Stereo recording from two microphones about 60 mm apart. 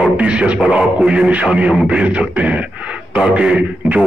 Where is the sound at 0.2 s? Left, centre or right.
Centre.